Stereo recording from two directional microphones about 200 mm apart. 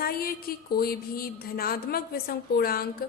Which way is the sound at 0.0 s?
50° left (ahead or behind).